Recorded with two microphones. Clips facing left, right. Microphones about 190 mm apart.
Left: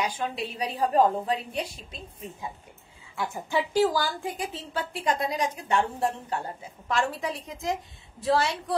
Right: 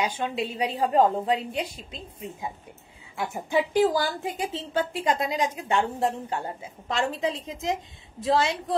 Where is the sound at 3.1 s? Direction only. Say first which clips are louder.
Right 3 dB; 20° right (ahead or behind).